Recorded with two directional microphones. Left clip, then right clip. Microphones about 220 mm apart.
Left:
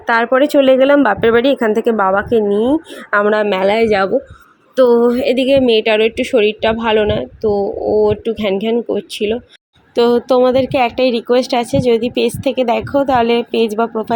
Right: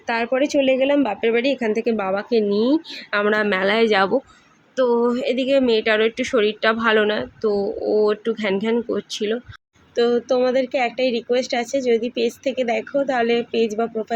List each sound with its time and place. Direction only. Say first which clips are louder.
0.1 s a woman's voice: left 8 dB; 5° left (ahead or behind)
2.0 s a woman's voice: left 8 dB; centre (ahead or behind)
2.5 s speech: left 5 dB; 25° left (ahead or behind)
3.2 s a woman's voice: left 6 dB; 5° left (ahead or behind)
4.8 s a woman's voice: left 8 dB; 20° left (ahead or behind)
9.9 s speech: left 7 dB; 25° left (ahead or behind)